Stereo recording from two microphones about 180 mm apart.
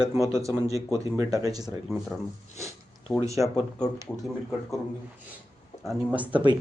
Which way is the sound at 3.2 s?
15° right (ahead or behind).